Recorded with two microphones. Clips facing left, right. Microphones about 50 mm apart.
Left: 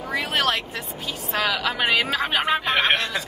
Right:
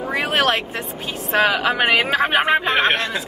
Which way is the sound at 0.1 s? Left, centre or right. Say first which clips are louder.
Right 4 dB; right.